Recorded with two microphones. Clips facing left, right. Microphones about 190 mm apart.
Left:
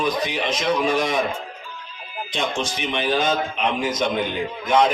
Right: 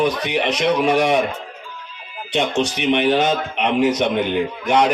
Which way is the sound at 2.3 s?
65° right (ahead or behind).